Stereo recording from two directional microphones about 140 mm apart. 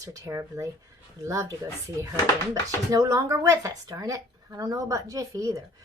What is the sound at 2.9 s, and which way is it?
Speech, 25° right (ahead or behind).